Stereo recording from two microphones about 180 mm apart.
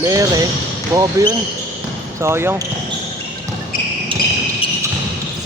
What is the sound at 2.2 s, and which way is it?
Speech, 15° right (ahead or behind).